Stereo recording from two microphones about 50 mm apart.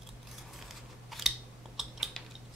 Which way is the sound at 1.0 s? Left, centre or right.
Centre.